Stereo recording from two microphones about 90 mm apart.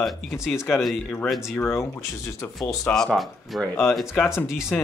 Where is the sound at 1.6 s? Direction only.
30° left (ahead or behind).